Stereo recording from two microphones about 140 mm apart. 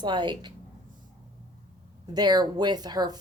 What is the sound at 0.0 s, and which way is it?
Speech, 35° right (ahead or behind).